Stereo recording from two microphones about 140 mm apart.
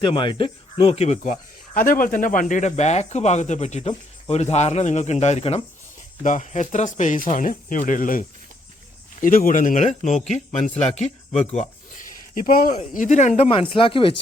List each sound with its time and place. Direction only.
0.0 s speech: 35° left (ahead or behind); by 1.3 s 50° left (ahead or behind)
1.7 s speech: 85° left; by 5.6 s 45° left (ahead or behind)
6.2 s speech: 60° left (ahead or behind)
9.2 s speech: 80° left
12.7 s speech: 60° left (ahead or behind); by 14.1 s 40° left (ahead or behind)